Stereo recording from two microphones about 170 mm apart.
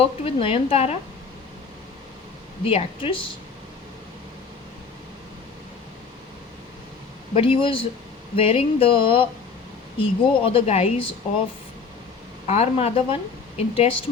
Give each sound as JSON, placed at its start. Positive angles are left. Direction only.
{"t": 0.0, "sound": "a woman's voice", "side_deg": 35}
{"t": 2.6, "sound": "speech", "side_deg": 30}
{"t": 7.3, "sound": "a woman's voice", "side_deg": 30}
{"t": 12.5, "sound": "a woman's voice", "side_deg": 40}